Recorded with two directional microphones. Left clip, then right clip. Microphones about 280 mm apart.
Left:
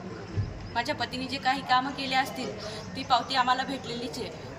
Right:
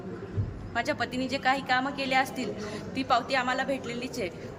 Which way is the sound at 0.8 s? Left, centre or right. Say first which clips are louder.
Right 1 dB; right.